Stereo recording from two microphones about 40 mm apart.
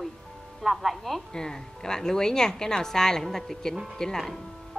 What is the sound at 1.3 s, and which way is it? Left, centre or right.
A woman's voice, centre.